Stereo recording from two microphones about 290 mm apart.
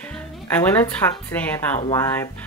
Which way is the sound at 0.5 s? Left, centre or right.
Centre.